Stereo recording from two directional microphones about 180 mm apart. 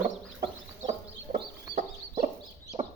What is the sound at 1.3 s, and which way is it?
Chicken, 50° right (ahead or behind).